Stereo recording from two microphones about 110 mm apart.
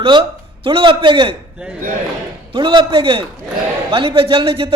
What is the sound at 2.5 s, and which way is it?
A man's voice, 50° right (ahead or behind).